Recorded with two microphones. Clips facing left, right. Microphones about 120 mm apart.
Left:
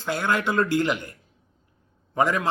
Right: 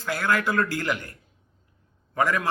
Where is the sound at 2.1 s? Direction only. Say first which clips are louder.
Left 2 dB; 20° left (ahead or behind).